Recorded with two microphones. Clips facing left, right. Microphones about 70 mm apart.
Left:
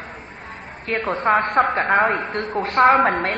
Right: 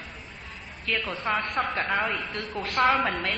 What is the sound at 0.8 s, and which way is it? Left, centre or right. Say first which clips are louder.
A woman's voice: left 9 dB; left.